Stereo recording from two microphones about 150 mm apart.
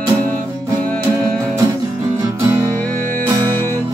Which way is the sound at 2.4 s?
20° right (ahead or behind).